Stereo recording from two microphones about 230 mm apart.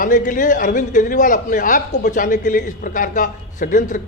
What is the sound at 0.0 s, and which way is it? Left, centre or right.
A man's voice, left.